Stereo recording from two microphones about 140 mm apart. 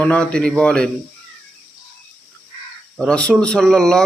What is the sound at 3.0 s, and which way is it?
A man's voice, 5° left (ahead or behind).